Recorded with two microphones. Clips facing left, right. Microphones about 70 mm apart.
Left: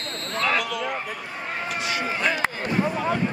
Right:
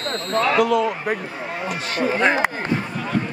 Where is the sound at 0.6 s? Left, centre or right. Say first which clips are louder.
Right 10 dB; right.